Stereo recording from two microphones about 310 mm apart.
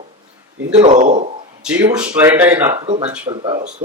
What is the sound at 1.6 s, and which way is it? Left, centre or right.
A man's voice, centre.